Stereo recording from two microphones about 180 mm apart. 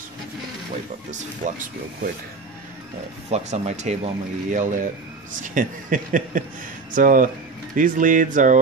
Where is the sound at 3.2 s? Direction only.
35° right (ahead or behind).